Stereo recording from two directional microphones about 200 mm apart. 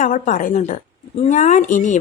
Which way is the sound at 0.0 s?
40° left (ahead or behind).